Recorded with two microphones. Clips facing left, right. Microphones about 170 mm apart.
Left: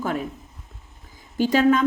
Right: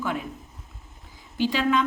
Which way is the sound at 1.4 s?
45° left (ahead or behind).